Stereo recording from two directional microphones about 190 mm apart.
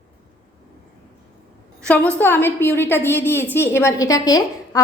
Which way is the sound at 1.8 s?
5° left (ahead or behind).